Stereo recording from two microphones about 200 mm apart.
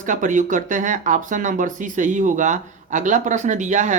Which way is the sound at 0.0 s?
40° right (ahead or behind).